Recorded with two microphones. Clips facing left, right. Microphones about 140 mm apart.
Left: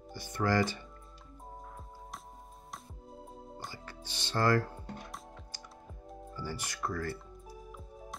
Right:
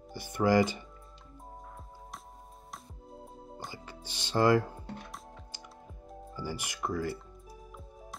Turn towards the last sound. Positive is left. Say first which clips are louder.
# right 3 dB
turn(degrees=-15)  # may be behind; listen again after turning